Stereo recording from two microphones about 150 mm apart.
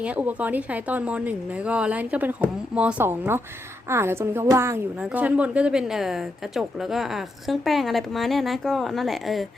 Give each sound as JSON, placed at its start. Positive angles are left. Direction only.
{"t": 0.0, "sound": "a woman's voice", "side_deg": -10}